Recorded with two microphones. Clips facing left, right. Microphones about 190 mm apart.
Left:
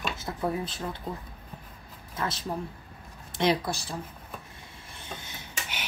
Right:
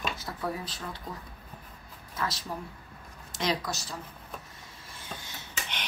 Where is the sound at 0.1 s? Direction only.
25° left (ahead or behind).